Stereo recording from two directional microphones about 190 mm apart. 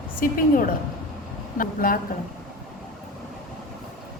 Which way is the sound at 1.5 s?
50° left (ahead or behind).